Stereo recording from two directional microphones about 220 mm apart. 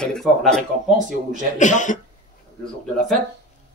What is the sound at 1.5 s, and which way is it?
Speech, 35° left (ahead or behind).